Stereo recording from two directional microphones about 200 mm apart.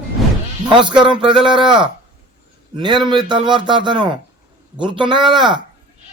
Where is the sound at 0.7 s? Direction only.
25° right (ahead or behind).